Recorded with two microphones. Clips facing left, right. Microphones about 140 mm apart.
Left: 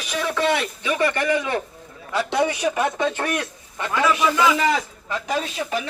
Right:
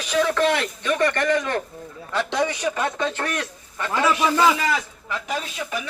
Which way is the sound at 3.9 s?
30° right (ahead or behind).